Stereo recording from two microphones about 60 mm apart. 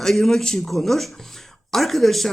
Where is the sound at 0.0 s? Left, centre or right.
Centre.